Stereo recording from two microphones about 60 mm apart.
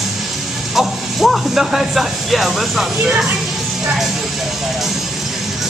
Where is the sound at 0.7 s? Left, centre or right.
Centre.